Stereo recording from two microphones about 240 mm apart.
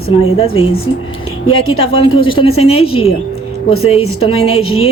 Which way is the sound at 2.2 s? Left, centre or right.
Left.